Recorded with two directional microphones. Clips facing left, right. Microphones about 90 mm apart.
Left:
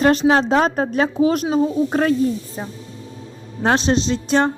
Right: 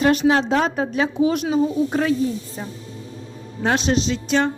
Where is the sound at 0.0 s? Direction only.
35° left (ahead or behind).